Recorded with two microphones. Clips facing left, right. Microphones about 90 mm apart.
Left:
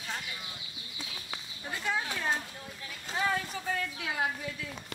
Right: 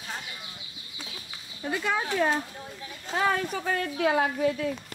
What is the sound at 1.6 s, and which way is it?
Speech, 65° right (ahead or behind).